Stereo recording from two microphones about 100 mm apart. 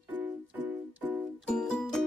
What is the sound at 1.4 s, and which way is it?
Music, 10° left (ahead or behind).